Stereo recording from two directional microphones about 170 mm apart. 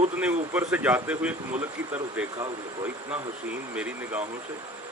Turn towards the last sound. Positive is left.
turn(degrees=-10)  # may be behind; listen again after turning